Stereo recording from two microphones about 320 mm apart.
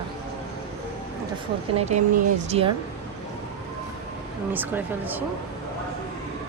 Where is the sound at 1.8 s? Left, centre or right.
Right.